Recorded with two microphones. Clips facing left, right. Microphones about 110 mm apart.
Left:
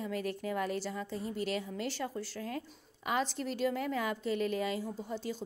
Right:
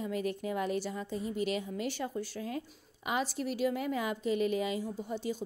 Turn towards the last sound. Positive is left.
turn(degrees=-15)  # may be behind; listen again after turning